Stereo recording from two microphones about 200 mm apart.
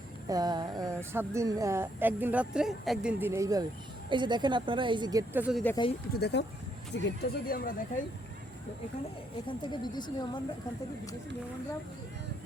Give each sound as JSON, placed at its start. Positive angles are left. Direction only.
{"t": 0.3, "sound": "speech", "side_deg": -20}
{"t": 5.3, "sound": "speech", "side_deg": -5}
{"t": 6.1, "sound": "speech", "side_deg": 55}
{"t": 9.5, "sound": "speech", "side_deg": 20}